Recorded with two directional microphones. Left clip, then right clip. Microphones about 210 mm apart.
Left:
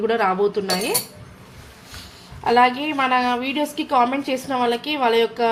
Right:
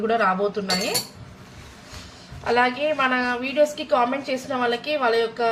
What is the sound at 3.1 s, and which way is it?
A woman's voice, 45° left (ahead or behind).